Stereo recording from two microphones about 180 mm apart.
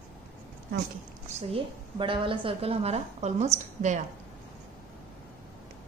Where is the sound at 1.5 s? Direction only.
30° right (ahead or behind).